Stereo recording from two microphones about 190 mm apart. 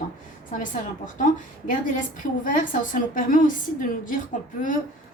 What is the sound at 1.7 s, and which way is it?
A woman's voice, 45° left (ahead or behind).